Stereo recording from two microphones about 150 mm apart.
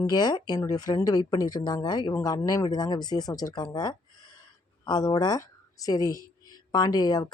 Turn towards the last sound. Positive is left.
turn(degrees=25)  # may be behind; listen again after turning